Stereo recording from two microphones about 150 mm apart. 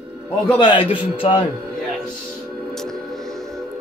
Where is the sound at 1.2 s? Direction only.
35° left (ahead or behind).